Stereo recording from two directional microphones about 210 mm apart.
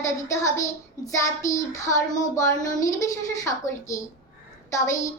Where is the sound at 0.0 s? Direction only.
15° left (ahead or behind).